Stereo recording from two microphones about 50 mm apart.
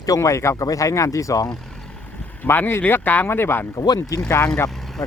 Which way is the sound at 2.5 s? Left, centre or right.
Left.